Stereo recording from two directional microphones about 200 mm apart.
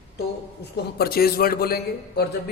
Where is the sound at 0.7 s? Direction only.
50° left (ahead or behind).